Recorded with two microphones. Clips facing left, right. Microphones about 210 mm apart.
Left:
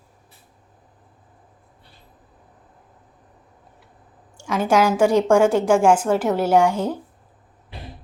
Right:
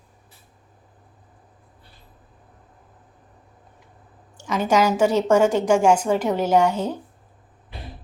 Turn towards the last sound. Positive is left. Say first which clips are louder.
# left 1 dB
turn(degrees=10)  # may be behind; listen again after turning